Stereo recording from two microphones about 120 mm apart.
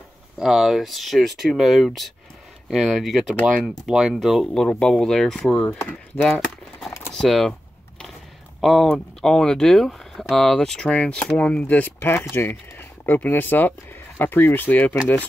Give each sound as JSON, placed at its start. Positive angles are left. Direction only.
{"t": 0.4, "sound": "speech", "side_deg": 0}
{"t": 6.1, "sound": "speech", "side_deg": 20}
{"t": 7.1, "sound": "speech", "side_deg": 0}